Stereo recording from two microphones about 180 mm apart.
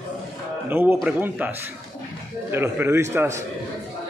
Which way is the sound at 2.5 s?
15° right (ahead or behind).